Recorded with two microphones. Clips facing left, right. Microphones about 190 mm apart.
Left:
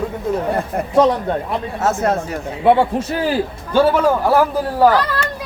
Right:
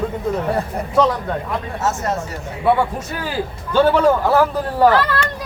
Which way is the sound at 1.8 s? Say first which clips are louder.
Left 5 dB; 55° left (ahead or behind).